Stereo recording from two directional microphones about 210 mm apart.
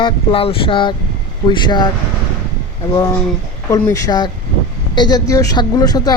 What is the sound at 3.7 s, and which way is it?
A woman's voice, 15° left (ahead or behind).